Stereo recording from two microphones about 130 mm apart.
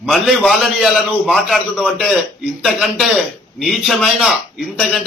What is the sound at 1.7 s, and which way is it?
A man's voice, 5° right (ahead or behind).